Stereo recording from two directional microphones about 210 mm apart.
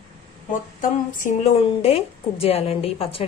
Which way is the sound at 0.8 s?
40° left (ahead or behind).